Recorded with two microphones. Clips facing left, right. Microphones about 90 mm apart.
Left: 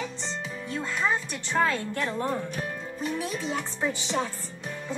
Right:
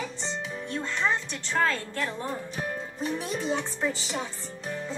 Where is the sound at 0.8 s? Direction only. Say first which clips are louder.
Left 1 dB; 10° left (ahead or behind).